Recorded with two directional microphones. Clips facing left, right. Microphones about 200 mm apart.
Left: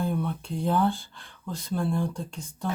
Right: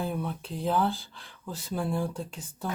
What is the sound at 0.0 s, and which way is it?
Speech, 5° right (ahead or behind).